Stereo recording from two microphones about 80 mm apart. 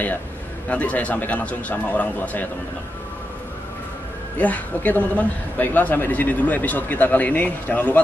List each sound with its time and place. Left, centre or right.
0.7 s a man's voice: centre
4.4 s a man's voice: centre